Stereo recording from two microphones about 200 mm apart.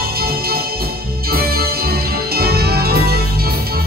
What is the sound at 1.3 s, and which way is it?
Music, 50° right (ahead or behind).